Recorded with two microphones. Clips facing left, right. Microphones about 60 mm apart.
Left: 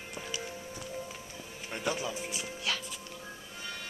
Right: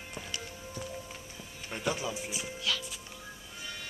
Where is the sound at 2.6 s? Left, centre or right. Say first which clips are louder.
Right 1 dB; left.